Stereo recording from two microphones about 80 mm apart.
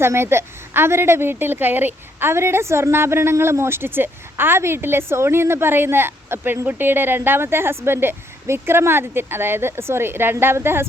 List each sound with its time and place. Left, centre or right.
0.0 s a woman's voice: right